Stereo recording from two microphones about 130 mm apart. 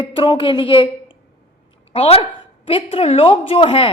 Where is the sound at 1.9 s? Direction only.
50° left (ahead or behind).